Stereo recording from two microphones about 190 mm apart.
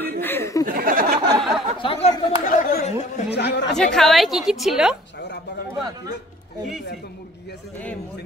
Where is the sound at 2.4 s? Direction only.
45° left (ahead or behind).